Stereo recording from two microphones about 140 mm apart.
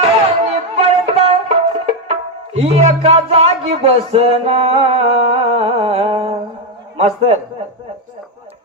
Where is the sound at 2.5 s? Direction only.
50° right (ahead or behind).